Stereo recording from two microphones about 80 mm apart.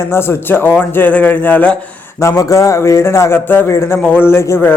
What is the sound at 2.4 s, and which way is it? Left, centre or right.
A man's voice, left.